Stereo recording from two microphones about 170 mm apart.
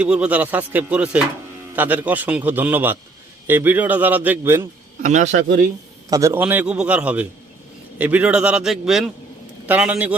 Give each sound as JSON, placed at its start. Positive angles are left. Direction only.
{"t": 0.0, "sound": "a man's voice", "side_deg": -5}
{"t": 5.0, "sound": "a man's voice", "side_deg": -45}
{"t": 6.1, "sound": "a man's voice", "side_deg": -20}